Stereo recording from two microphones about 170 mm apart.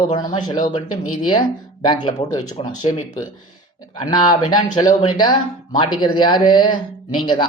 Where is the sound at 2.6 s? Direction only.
30° left (ahead or behind).